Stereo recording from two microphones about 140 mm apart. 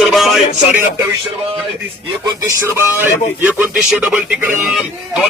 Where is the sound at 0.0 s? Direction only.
Centre (ahead or behind).